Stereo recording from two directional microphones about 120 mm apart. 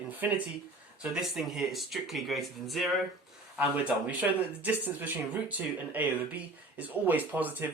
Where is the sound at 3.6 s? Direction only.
15° right (ahead or behind).